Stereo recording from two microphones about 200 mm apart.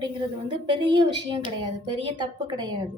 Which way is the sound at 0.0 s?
20° right (ahead or behind).